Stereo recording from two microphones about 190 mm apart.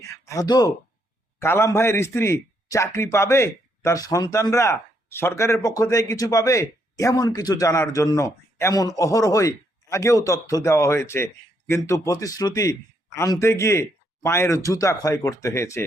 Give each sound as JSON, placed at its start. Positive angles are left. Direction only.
{"t": 0.3, "sound": "a man's voice", "side_deg": 20}